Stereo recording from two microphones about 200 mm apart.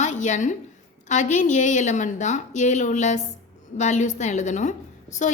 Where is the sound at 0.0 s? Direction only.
35° left (ahead or behind).